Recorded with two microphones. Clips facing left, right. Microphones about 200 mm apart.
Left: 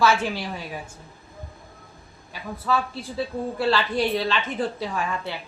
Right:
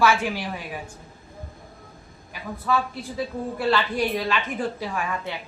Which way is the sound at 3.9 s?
15° right (ahead or behind).